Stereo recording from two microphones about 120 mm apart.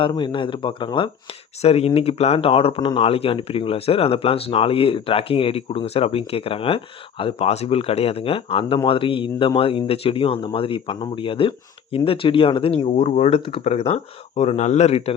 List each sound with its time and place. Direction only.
0.0 s speech: 40° left (ahead or behind)
1.6 s speech: 60° left (ahead or behind)